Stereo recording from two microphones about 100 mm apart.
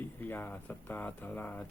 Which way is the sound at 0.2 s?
20° left (ahead or behind).